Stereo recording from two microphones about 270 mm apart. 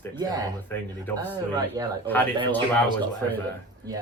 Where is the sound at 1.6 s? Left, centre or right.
Centre.